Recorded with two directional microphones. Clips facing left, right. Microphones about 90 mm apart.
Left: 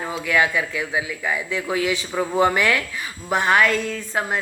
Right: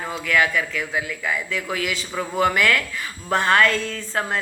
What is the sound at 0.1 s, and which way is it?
A woman's voice, 20° left (ahead or behind).